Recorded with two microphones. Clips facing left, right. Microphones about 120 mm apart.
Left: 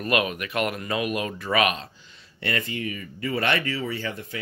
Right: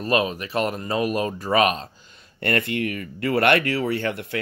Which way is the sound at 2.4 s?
60° right (ahead or behind).